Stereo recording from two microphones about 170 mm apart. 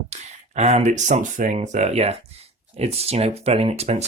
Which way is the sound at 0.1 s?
40° right (ahead or behind).